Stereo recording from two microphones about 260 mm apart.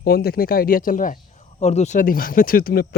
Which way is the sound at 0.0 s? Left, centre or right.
Left.